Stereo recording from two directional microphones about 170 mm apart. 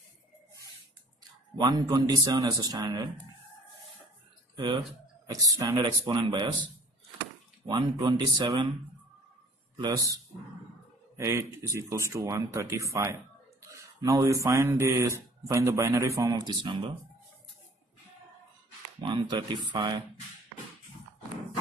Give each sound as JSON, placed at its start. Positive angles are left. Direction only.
{"t": 1.6, "sound": "a man's voice", "side_deg": -25}
{"t": 5.2, "sound": "a man's voice", "side_deg": -20}
{"t": 7.6, "sound": "a man's voice", "side_deg": -25}
{"t": 9.8, "sound": "a man's voice", "side_deg": -20}
{"t": 11.1, "sound": "a man's voice", "side_deg": -15}
{"t": 19.0, "sound": "a man's voice", "side_deg": -25}